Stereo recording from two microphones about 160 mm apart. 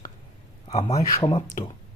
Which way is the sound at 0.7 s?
40° left (ahead or behind).